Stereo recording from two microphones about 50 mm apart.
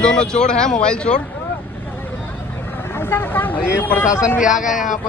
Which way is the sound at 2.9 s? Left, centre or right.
Left.